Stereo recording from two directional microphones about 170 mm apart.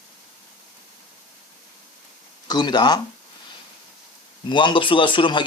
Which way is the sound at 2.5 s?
25° left (ahead or behind).